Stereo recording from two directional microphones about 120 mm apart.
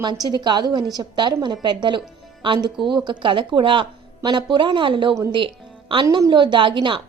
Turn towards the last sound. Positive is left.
turn(degrees=-45)  # may be behind; listen again after turning